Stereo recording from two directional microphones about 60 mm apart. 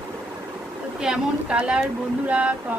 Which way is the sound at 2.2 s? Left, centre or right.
Right.